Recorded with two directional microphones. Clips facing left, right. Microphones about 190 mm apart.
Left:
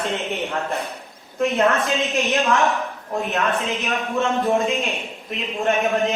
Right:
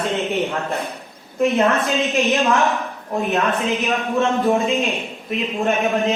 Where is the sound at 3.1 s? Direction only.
15° right (ahead or behind).